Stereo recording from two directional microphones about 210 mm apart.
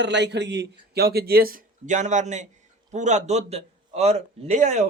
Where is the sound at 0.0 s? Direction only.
55° right (ahead or behind).